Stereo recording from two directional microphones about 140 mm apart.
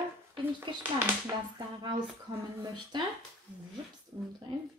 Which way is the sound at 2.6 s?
30° right (ahead or behind).